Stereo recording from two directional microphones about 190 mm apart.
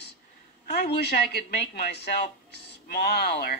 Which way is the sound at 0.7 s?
55° left (ahead or behind).